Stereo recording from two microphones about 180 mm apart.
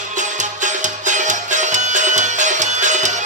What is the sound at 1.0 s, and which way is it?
Music, 45° right (ahead or behind).